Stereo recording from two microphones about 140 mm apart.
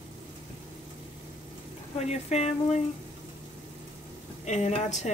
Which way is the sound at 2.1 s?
50° left (ahead or behind).